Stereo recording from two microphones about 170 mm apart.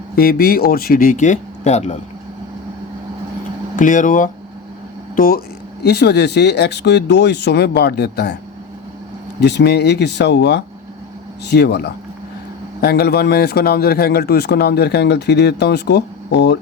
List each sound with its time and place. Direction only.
0.2 s speech: 60° left (ahead or behind); by 2.0 s 40° left (ahead or behind)
3.8 s speech: 50° left (ahead or behind)
5.8 s speech: 75° left (ahead or behind)
9.4 s speech: 75° left (ahead or behind)
12.8 s speech: 65° left (ahead or behind); by 16.6 s 85° left